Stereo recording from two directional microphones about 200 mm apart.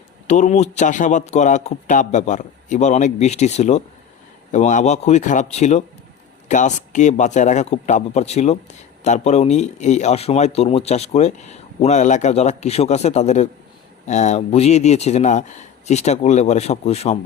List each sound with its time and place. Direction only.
0.3 s speech: 35° left (ahead or behind)